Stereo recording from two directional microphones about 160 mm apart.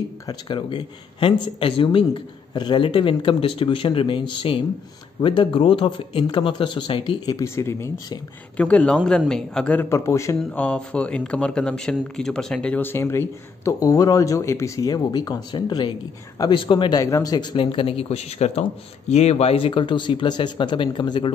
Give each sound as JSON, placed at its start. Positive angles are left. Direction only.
{"t": 0.3, "sound": "speech", "side_deg": 30}